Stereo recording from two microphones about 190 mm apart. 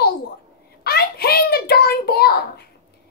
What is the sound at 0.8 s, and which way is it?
Hands, 55° left (ahead or behind).